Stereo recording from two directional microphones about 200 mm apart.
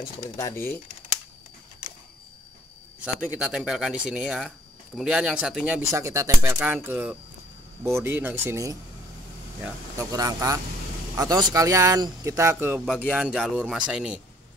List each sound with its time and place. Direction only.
0.4 s speech: 15° left (ahead or behind)
3.3 s speech: 5° right (ahead or behind)
5.9 s speech: 15° right (ahead or behind)